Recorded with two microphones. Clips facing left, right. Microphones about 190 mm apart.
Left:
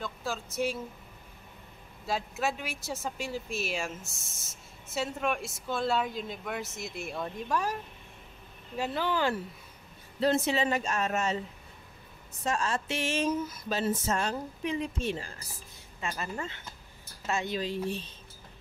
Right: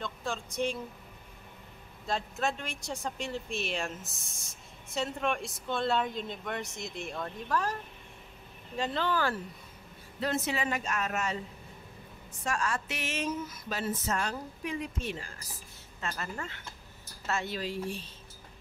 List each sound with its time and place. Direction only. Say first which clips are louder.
0.0 s speech: left 1 dB; 5° left (ahead or behind)
2.0 s speech: left 1 dB; 5° left (ahead or behind)
8.7 s speech: even; 10° left (ahead or behind)
10.2 s speech: left 5 dB; 30° left (ahead or behind)
12.4 s speech: left 2 dB; 25° left (ahead or behind)
16.0 s speech: left 2 dB; 15° left (ahead or behind)